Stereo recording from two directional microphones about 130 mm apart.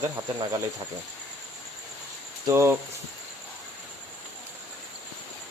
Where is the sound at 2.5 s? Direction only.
20° right (ahead or behind).